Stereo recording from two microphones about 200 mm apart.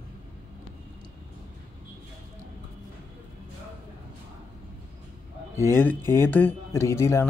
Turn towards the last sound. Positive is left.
turn(degrees=15)  # may be behind; listen again after turning